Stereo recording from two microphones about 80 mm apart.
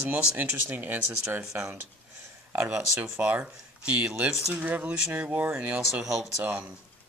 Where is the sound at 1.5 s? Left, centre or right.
Right.